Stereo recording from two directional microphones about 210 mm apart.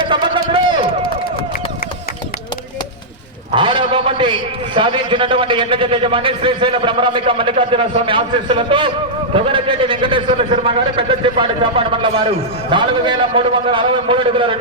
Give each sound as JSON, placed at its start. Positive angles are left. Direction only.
{"t": 0.1, "sound": "run", "side_deg": -25}
{"t": 3.5, "sound": "a man's voice", "side_deg": -20}